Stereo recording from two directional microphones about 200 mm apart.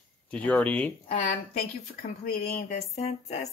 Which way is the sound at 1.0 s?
40° left (ahead or behind).